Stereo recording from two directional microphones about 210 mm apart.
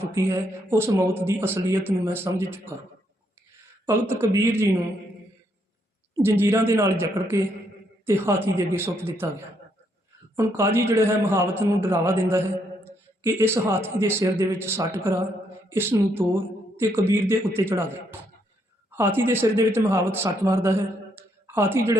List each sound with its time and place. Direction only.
0.1 s speech: 10° right (ahead or behind)
3.8 s speech: 15° right (ahead or behind)
6.1 s speech: 10° right (ahead or behind)
10.3 s speech: 15° right (ahead or behind)
18.9 s speech: 10° right (ahead or behind)
21.2 s a sound: 10° right (ahead or behind)